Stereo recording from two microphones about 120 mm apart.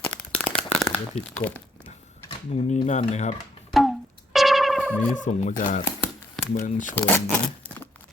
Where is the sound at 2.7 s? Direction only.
75° left (ahead or behind).